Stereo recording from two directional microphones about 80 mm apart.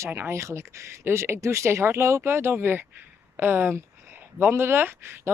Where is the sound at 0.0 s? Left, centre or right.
Right.